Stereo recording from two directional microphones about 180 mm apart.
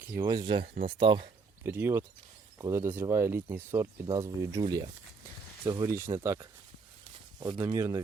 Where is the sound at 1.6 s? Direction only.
15° right (ahead or behind).